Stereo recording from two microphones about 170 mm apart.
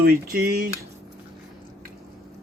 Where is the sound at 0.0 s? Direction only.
60° right (ahead or behind).